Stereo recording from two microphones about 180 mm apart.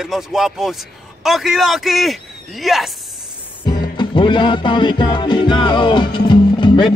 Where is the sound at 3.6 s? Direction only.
25° left (ahead or behind).